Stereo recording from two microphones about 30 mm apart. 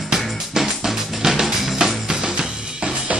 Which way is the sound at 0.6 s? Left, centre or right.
Centre.